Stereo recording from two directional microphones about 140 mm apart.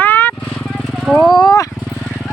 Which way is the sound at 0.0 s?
15° left (ahead or behind).